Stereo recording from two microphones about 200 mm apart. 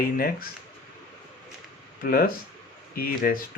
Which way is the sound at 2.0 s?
45° left (ahead or behind).